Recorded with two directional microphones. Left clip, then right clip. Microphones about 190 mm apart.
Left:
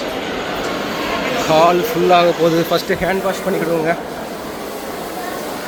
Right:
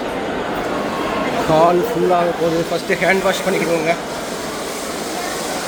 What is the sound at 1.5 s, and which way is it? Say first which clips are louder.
Speech: left 1 dB; 15° right (ahead or behind).